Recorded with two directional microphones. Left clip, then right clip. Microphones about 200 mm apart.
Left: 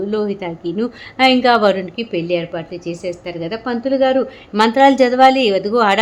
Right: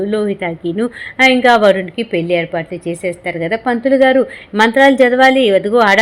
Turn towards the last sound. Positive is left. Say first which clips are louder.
# right 4 dB
turn(degrees=-5)  # may be behind; listen again after turning